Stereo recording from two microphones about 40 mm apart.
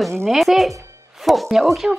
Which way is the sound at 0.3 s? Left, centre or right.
Centre.